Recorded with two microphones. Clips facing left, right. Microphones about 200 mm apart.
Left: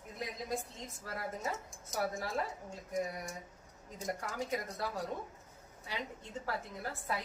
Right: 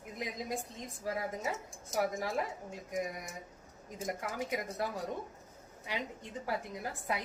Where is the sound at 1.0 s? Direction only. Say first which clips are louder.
Right 4 dB; 15° right (ahead or behind).